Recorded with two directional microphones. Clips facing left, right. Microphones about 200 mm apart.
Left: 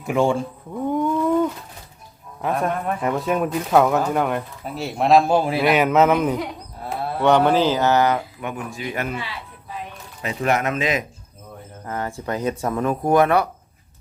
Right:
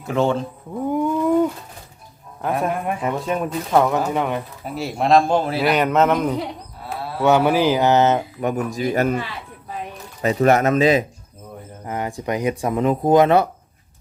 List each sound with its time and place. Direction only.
0.0 s speech: 10° left (ahead or behind)
0.9 s a sound: 10° right (ahead or behind)
2.4 s speech: 5° right (ahead or behind)
3.0 s speech: centre (ahead or behind)
5.6 s speech: centre (ahead or behind); by 8.2 s 20° right (ahead or behind)
8.4 s speech: 40° right (ahead or behind)
11.9 s speech: 15° right (ahead or behind)